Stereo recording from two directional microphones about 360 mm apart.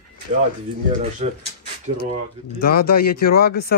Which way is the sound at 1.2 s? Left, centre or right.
Centre.